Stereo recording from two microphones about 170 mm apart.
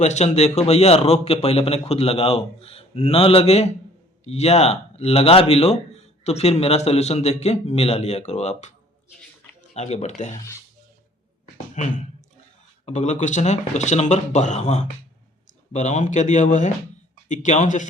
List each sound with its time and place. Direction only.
0.0 s speech: 40° left (ahead or behind)
9.7 s speech: 40° left (ahead or behind)
11.8 s speech: 45° left (ahead or behind)